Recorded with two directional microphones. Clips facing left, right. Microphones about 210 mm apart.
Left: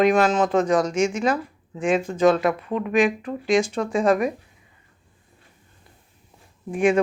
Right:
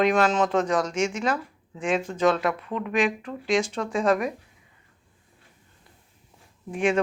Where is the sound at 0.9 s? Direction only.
45° left (ahead or behind).